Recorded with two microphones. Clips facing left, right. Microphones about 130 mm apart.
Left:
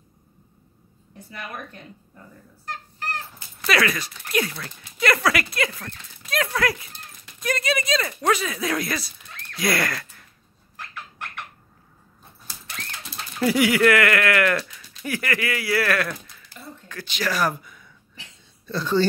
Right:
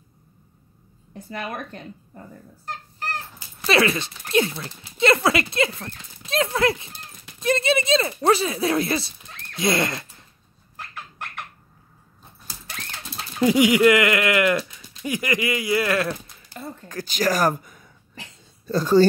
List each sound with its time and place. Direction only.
1.3 s speech: 50° right (ahead or behind)
3.3 s speech: 25° right (ahead or behind)
13.4 s speech: 20° right (ahead or behind)
16.5 s speech: 45° right (ahead or behind)